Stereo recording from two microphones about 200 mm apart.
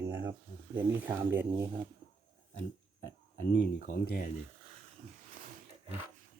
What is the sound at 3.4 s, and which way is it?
Speech, 50° left (ahead or behind).